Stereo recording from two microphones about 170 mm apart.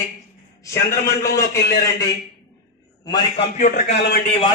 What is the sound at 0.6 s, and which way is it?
A man's voice, 20° left (ahead or behind).